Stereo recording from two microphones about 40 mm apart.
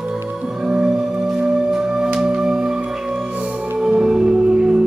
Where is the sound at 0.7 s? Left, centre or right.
Centre.